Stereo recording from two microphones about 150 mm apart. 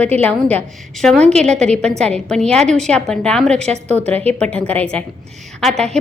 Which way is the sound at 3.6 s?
50° right (ahead or behind).